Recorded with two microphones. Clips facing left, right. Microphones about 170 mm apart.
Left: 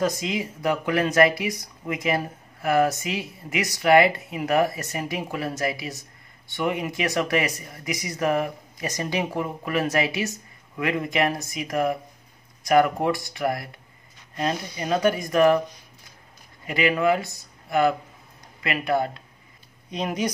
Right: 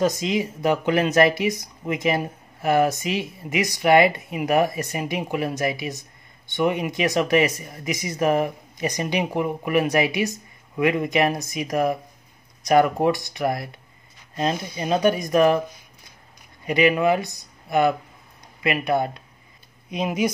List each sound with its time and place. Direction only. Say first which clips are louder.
0.0 s speech: right 3 dB; 25° right (ahead or behind)
16.6 s speech: right 3 dB; 20° right (ahead or behind)